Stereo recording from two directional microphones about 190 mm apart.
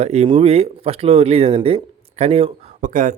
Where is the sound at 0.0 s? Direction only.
35° right (ahead or behind).